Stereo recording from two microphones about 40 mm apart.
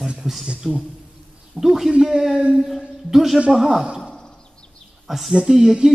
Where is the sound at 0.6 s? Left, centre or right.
Centre.